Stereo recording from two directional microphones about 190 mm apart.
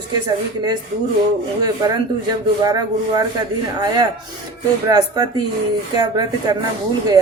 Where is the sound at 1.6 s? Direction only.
20° right (ahead or behind).